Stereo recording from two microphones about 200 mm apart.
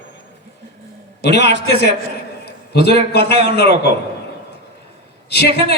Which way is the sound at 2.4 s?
55° left (ahead or behind).